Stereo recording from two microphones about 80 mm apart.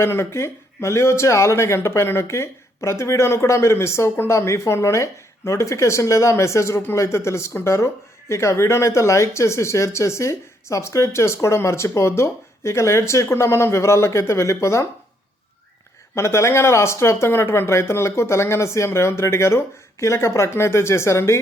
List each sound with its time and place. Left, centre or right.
0.0 s speech: left
16.1 s speech: left